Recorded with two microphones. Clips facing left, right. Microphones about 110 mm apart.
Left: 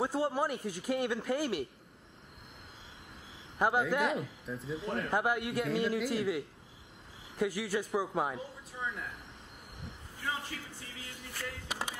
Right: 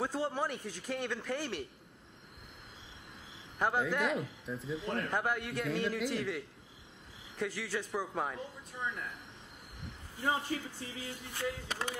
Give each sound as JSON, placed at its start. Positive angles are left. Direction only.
{"t": 0.0, "sound": "a man's voice", "side_deg": 10}
{"t": 3.5, "sound": "a man's voice", "side_deg": 5}
{"t": 10.5, "sound": "speech", "side_deg": -35}
{"t": 11.0, "sound": "music", "side_deg": -20}